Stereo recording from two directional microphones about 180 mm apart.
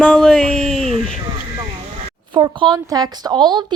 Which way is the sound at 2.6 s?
20° right (ahead or behind).